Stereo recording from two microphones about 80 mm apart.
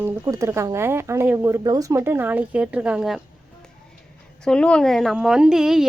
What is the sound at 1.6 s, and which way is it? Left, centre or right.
Speech, right.